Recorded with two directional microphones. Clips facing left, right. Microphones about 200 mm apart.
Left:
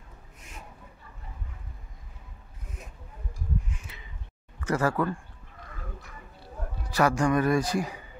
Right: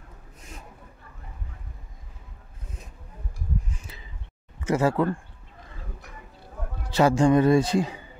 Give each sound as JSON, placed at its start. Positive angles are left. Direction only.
{"t": 3.7, "sound": "a sound", "side_deg": -35}
{"t": 4.6, "sound": "speech", "side_deg": -20}
{"t": 6.9, "sound": "a man's voice", "side_deg": -25}